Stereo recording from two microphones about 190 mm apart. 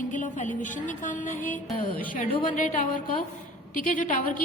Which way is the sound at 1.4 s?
10° left (ahead or behind).